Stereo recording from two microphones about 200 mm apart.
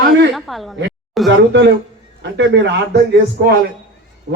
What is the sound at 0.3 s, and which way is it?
Speech, centre (ahead or behind).